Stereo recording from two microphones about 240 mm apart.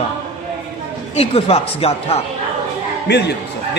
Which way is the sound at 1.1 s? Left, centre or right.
Left.